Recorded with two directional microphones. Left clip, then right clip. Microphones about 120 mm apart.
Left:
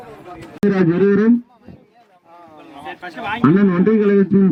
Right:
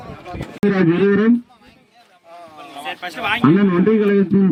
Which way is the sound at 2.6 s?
20° right (ahead or behind).